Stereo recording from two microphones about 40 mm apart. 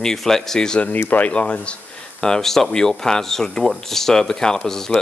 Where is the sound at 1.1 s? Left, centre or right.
Left.